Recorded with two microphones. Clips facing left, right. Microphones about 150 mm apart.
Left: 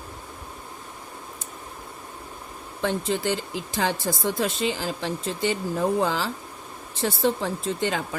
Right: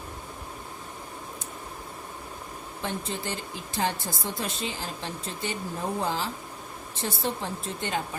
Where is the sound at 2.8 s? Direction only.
90° left.